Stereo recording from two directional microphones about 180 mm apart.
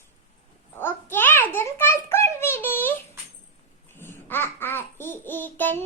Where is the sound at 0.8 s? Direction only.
10° left (ahead or behind).